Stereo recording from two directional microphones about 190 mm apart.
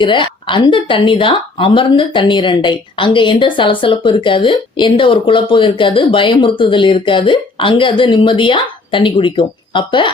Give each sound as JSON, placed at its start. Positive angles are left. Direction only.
{"t": 0.0, "sound": "a woman's voice", "side_deg": 25}